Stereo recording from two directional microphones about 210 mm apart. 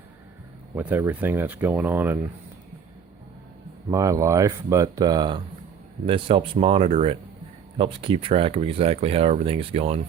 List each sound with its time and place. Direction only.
0.8 s speech: 10° right (ahead or behind)
3.9 s speech: 15° right (ahead or behind)